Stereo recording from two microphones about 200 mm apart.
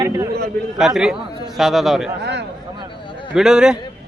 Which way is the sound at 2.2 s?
60° right (ahead or behind).